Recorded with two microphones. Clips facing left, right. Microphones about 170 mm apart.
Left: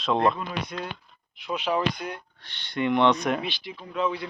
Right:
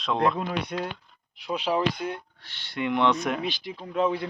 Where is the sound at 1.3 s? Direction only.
35° right (ahead or behind).